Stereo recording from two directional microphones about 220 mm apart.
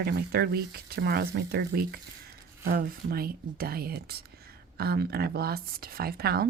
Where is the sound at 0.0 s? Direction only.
45° right (ahead or behind).